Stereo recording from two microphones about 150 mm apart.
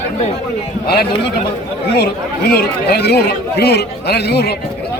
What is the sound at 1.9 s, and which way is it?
Speech, 90° left.